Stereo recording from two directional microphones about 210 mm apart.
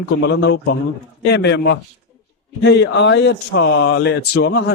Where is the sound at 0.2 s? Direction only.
60° left (ahead or behind).